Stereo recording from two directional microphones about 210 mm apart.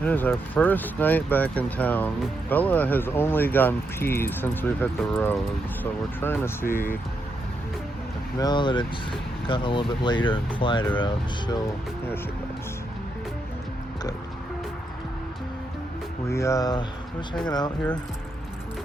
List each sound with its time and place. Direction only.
0.0 s speech: 10° left (ahead or behind)
8.4 s speech: 20° left (ahead or behind)
16.3 s speech: 15° left (ahead or behind)